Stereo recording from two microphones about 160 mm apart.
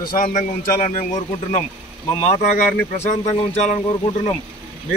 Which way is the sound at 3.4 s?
45° left (ahead or behind).